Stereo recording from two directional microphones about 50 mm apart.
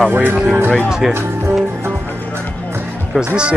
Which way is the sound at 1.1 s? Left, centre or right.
Right.